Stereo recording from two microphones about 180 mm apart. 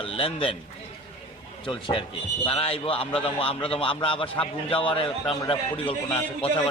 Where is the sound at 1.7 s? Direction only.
25° left (ahead or behind).